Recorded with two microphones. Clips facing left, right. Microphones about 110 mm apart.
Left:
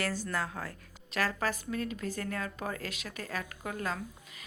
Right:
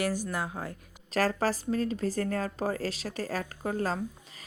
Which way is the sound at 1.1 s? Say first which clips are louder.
Right 5 dB; 35° right (ahead or behind).